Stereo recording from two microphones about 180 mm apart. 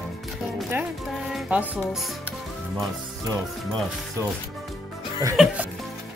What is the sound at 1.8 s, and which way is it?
Speech, centre (ahead or behind).